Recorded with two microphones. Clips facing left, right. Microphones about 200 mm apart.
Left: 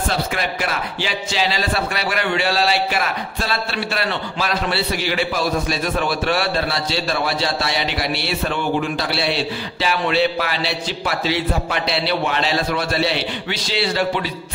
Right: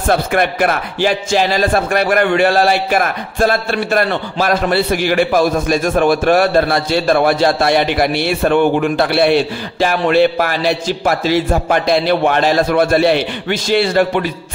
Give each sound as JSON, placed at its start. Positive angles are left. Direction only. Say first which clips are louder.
{"t": 0.1, "sound": "a man's voice", "louder": "right 8 dB", "side_deg": -55}